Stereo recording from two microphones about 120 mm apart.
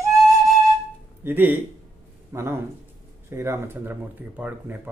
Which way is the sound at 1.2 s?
15° right (ahead or behind).